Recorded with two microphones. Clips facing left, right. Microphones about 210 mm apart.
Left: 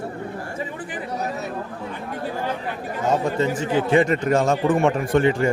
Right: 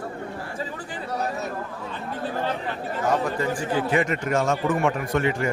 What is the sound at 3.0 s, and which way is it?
A man's voice, 25° left (ahead or behind).